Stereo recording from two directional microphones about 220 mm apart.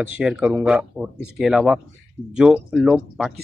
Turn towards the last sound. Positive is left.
turn(degrees=0)  # may be behind; listen again after turning